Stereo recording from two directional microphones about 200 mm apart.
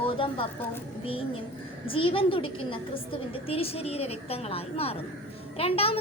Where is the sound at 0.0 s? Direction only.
25° left (ahead or behind).